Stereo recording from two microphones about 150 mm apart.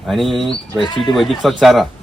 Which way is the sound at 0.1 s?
Centre (ahead or behind).